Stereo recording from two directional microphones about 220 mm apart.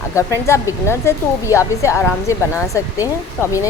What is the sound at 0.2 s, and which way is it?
A woman's voice, 15° left (ahead or behind).